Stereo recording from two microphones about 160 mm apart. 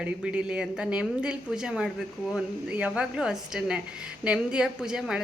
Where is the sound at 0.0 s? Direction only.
5° right (ahead or behind).